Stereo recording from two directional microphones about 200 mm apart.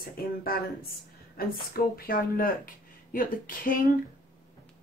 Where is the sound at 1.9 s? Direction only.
45° left (ahead or behind).